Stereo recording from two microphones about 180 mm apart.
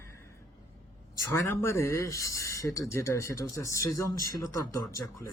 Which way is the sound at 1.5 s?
15° left (ahead or behind).